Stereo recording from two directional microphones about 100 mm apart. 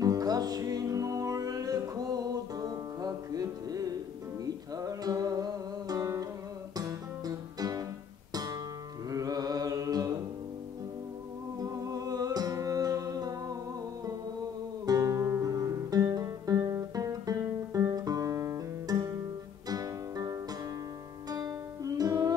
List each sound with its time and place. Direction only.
0.0 s music: 40° right (ahead or behind)
8.3 s guitar: 40° right (ahead or behind)
9.1 s mantra: 35° right (ahead or behind)
11.6 s humming: 35° right (ahead or behind)
14.9 s music: 35° right (ahead or behind)